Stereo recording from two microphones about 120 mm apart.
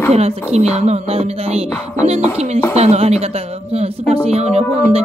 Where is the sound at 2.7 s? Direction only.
60° right (ahead or behind).